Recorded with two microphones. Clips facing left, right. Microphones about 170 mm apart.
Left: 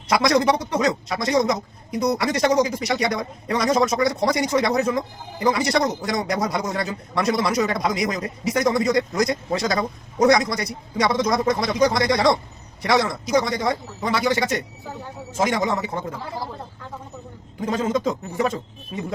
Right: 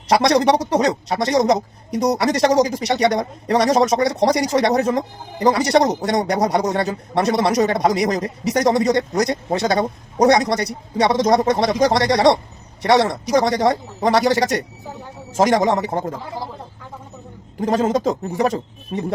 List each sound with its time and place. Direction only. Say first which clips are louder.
0.1 s a man's voice: right 4 dB; 35° right (ahead or behind)
17.6 s speech: right 4 dB; 45° right (ahead or behind)